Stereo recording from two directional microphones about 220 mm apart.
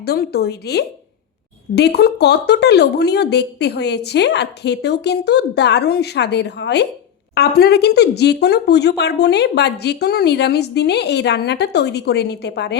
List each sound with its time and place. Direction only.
0.0 s speech: 45° left (ahead or behind)